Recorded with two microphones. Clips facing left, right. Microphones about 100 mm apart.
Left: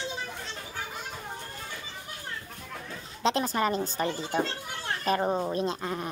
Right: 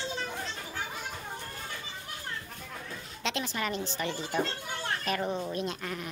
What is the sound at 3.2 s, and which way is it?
Speech, 40° left (ahead or behind).